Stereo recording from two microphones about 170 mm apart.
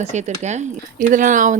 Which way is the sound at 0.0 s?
40° right (ahead or behind).